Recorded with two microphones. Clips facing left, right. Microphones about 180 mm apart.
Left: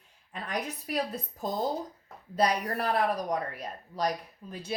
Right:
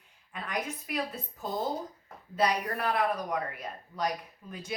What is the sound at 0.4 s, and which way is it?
Speech, 35° left (ahead or behind).